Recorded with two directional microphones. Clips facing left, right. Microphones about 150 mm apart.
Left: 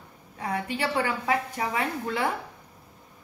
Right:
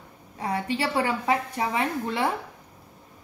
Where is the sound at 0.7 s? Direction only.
30° right (ahead or behind).